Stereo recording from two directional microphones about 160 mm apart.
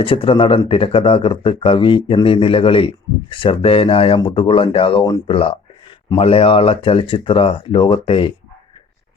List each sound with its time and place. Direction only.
0.0 s speech: 35° left (ahead or behind)